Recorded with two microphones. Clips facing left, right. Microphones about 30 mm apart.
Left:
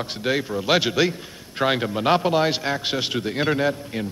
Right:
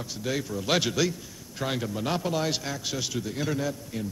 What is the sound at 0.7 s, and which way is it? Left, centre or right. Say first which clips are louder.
A man's voice: left 5 dB; left.